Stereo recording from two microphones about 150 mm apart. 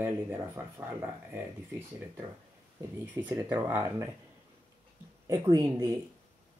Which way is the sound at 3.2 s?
25° right (ahead or behind).